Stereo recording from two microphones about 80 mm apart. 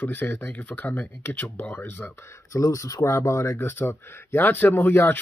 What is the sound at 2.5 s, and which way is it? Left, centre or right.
Speech, left.